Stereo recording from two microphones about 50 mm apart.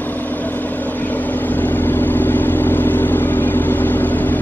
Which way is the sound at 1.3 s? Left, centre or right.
Left.